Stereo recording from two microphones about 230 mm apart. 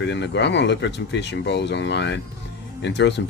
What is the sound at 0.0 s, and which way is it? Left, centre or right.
Speech, left.